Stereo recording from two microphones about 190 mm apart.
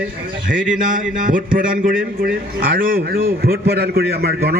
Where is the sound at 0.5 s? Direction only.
5° right (ahead or behind).